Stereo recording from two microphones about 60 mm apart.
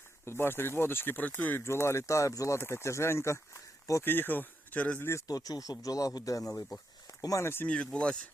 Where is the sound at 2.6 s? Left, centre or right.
Left.